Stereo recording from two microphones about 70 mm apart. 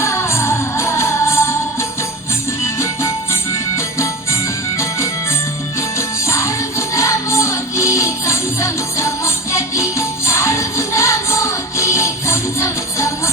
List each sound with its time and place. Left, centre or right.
0.0 s music: left